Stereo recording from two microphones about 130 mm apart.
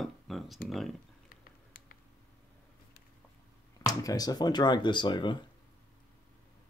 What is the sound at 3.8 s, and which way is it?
Speech, 30° left (ahead or behind).